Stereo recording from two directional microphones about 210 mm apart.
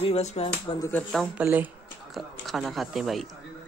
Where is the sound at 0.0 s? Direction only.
30° left (ahead or behind).